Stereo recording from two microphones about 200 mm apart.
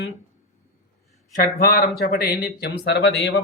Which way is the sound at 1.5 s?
50° left (ahead or behind).